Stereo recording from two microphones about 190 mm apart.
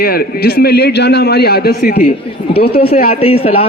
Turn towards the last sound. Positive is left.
turn(degrees=30)  # may be behind; listen again after turning